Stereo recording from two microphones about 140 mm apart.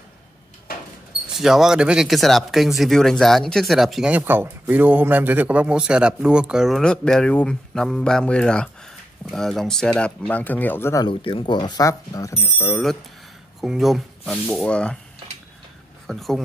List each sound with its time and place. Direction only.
1.2 s speech: 5° right (ahead or behind); by 11.1 s 20° left (ahead or behind)
11.1 s speech: 40° left (ahead or behind); by 12.4 s 25° left (ahead or behind)
12.6 s speech: centre (ahead or behind)
16.1 s speech: centre (ahead or behind)